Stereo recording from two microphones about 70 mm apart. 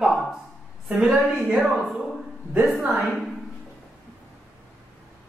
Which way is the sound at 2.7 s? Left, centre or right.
Centre.